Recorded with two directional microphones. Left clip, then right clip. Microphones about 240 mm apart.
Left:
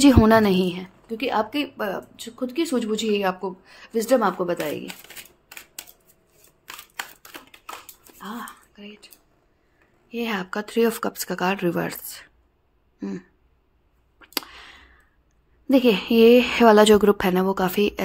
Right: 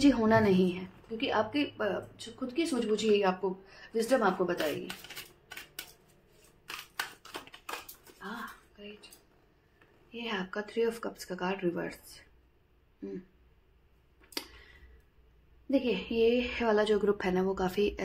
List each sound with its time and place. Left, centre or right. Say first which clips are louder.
0.0 s a woman's voice: left 9 dB; left
10.1 s a woman's voice: left 9 dB; left
15.7 s a woman's voice: left 12 dB; left